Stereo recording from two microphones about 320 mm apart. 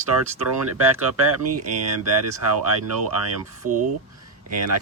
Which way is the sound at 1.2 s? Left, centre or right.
Right.